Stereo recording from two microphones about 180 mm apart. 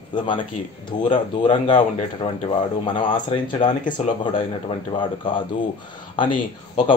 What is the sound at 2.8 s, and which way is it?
Speech, 25° left (ahead or behind).